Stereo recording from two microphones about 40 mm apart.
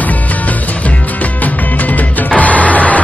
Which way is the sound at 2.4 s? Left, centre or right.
Left.